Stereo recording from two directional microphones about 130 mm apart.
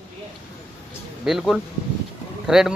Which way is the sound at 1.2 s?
Centre (ahead or behind).